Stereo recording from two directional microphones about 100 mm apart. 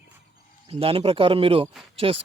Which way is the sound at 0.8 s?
65° right (ahead or behind).